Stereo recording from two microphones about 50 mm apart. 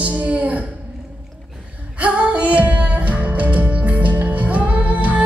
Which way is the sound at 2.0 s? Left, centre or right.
Right.